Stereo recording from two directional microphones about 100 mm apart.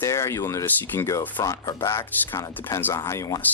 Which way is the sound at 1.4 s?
35° left (ahead or behind).